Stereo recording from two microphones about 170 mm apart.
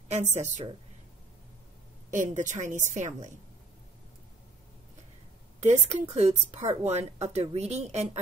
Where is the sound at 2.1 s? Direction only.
45° right (ahead or behind).